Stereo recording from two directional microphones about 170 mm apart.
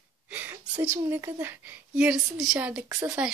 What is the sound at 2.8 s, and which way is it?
Speech, 20° right (ahead or behind).